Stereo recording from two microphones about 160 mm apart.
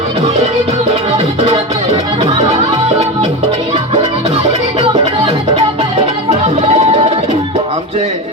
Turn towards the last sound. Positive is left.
turn(degrees=-45)  # may be behind; listen again after turning